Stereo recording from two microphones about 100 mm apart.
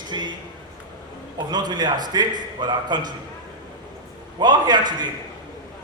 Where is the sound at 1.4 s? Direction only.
45° right (ahead or behind).